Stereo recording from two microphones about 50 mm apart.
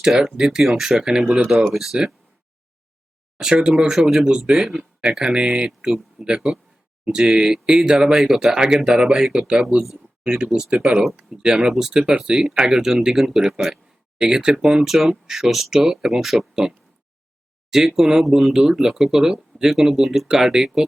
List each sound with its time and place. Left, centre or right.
0.0 s speech: centre
3.3 s speech: centre
4.0 s speech: centre
4.8 s a sound: right
5.1 s speech: centre
15.7 s speech: centre